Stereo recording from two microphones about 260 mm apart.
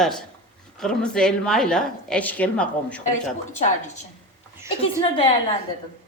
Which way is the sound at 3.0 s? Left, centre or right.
Left.